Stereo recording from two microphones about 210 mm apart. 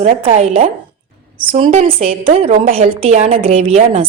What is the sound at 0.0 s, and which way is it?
A woman's voice, 35° right (ahead or behind).